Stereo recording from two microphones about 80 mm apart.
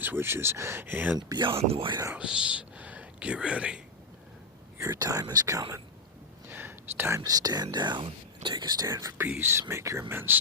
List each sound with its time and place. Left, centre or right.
0.0 s speech: right
1.3 s speech: right
2.1 s speech: centre
4.8 s speech: right
6.5 s whispering: right
7.3 s speech: right
8.9 s speech: right